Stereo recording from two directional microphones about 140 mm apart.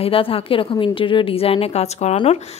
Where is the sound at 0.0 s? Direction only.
40° left (ahead or behind).